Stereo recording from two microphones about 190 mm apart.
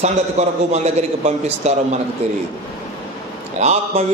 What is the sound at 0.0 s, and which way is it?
A man's voice, 35° right (ahead or behind).